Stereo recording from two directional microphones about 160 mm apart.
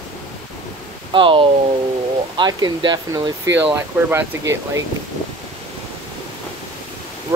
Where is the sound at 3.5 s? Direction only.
10° right (ahead or behind).